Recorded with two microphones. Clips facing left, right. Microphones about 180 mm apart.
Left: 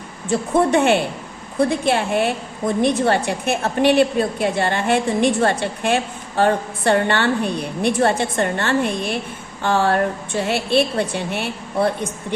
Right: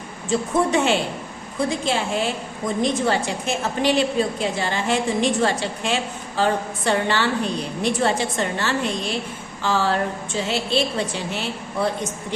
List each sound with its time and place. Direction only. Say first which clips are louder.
0.3 s a woman's voice: left 3 dB; 60° left (ahead or behind)